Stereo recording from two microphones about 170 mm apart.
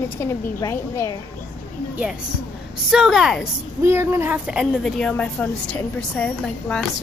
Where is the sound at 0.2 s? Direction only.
15° left (ahead or behind).